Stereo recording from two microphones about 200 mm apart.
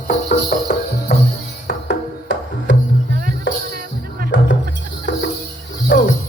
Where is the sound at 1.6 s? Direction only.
65° left (ahead or behind).